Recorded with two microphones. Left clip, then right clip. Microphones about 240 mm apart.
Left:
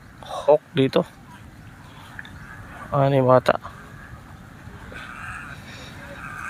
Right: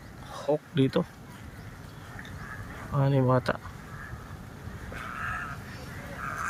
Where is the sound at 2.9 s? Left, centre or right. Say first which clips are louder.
Left 10 dB; centre.